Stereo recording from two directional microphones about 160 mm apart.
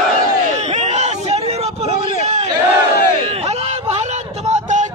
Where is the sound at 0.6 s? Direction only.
45° right (ahead or behind).